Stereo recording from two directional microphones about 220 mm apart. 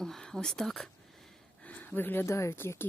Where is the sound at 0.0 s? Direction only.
Centre (ahead or behind).